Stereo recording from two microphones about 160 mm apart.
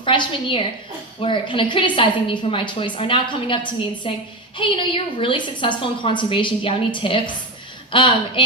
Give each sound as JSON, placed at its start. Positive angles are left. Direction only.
{"t": 0.0, "sound": "a woman's voice", "side_deg": 30}